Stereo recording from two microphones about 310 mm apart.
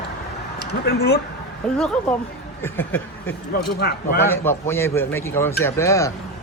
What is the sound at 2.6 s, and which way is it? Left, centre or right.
A man's voice, centre.